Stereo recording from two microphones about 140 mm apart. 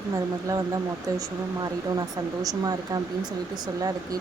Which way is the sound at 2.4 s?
25° right (ahead or behind).